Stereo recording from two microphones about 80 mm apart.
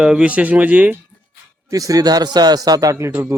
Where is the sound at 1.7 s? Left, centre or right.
Right.